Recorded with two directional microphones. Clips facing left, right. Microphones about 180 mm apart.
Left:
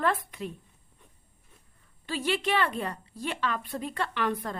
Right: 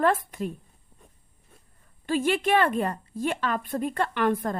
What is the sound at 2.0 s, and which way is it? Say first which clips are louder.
A woman's voice: right 5 dB; 50° right (ahead or behind).